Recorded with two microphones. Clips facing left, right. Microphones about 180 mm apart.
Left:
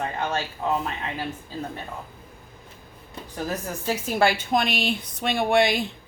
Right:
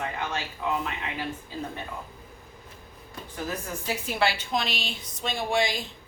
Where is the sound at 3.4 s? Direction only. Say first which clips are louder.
Left 4 dB; 40° left (ahead or behind); by 5.8 s 60° left (ahead or behind).